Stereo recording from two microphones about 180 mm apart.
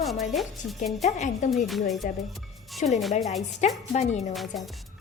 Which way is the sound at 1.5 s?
Centre (ahead or behind).